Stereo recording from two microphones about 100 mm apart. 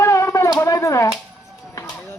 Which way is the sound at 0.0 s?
30° left (ahead or behind).